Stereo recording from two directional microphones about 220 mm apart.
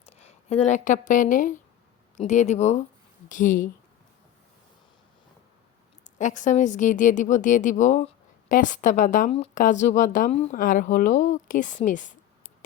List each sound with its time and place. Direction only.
0.2 s speech: 30° left (ahead or behind)
6.1 s speech: 35° left (ahead or behind)